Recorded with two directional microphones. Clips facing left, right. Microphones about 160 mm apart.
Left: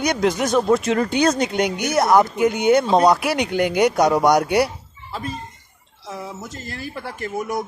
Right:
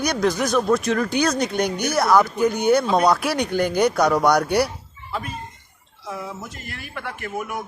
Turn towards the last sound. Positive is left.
turn(degrees=35)  # may be behind; listen again after turning